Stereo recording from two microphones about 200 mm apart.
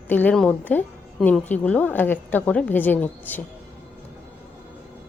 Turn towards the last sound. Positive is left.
turn(degrees=10)  # may be behind; listen again after turning